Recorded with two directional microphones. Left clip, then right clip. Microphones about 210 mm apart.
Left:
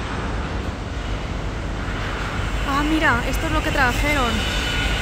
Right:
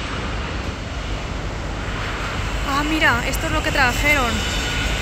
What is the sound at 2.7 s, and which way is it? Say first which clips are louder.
Speech: right 1 dB; 5° left (ahead or behind).